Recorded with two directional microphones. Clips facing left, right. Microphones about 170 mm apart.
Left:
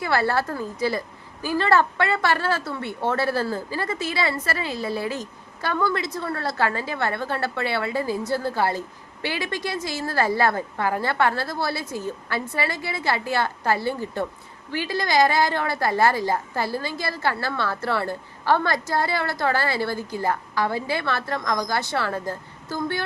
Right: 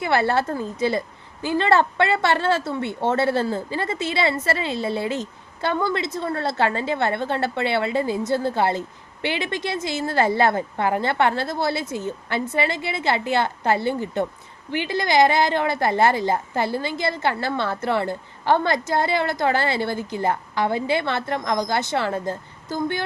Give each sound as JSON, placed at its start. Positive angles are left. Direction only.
{"t": 0.0, "sound": "a woman's voice", "side_deg": -25}